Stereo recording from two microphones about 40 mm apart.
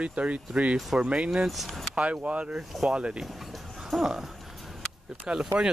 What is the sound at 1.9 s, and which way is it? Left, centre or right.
Speech, right.